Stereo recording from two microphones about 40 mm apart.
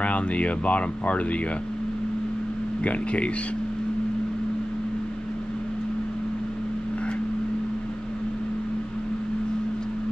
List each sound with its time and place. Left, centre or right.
0.0 s speech: left
2.8 s speech: left